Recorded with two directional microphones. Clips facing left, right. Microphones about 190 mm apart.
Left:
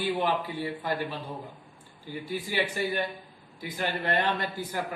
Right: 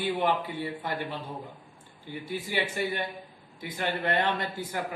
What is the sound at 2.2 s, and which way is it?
Speech, 20° right (ahead or behind).